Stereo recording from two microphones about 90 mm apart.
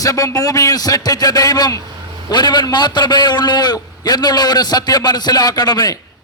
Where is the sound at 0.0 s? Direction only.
40° left (ahead or behind).